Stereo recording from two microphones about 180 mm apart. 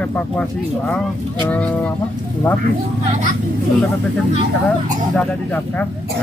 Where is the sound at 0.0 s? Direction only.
5° left (ahead or behind).